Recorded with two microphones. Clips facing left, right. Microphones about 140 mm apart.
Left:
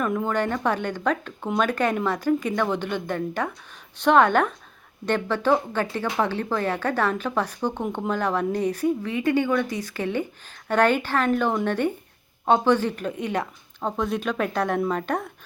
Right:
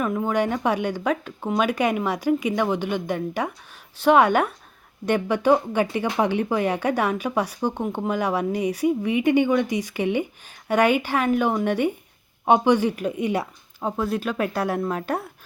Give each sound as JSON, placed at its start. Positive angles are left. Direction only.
{"t": 0.0, "sound": "speech", "side_deg": -5}